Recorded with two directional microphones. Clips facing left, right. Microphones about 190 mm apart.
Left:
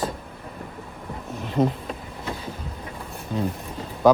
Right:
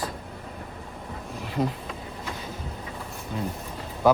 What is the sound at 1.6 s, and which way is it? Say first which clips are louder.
Speech: left 5 dB; 45° left (ahead or behind).